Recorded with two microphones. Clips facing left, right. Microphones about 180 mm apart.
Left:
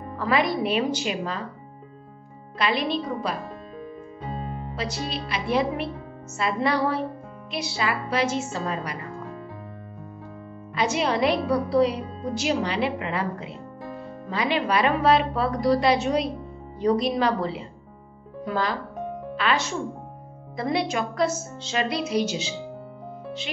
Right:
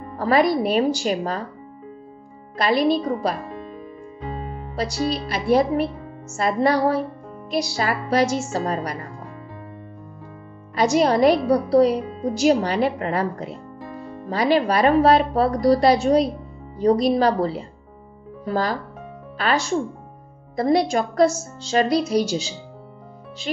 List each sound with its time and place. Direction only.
0.1 s a woman's voice: 40° right (ahead or behind)
2.5 s a woman's voice: 40° right (ahead or behind)
4.7 s a woman's voice: 40° right (ahead or behind)
10.7 s a woman's voice: 40° right (ahead or behind)